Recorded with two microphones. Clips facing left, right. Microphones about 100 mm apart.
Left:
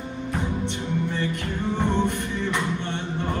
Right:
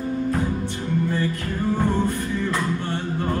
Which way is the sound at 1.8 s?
20° left (ahead or behind).